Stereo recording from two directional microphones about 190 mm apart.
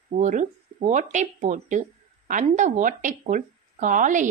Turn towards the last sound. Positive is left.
turn(degrees=-40)  # may be behind; listen again after turning